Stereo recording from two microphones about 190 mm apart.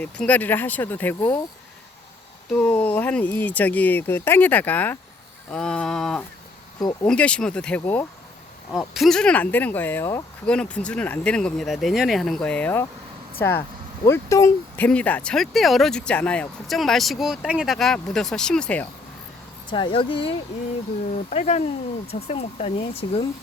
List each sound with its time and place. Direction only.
0.0 s speech: 5° left (ahead or behind)
2.5 s speech: 5° left (ahead or behind)
6.7 s speech: 20° left (ahead or behind)
7.1 s speech: 5° left (ahead or behind)
19.7 s speech: 25° left (ahead or behind)
21.2 s speech: 35° left (ahead or behind)